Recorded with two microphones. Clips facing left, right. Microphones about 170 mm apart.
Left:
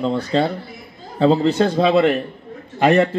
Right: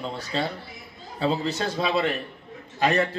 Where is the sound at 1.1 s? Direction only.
45° left (ahead or behind).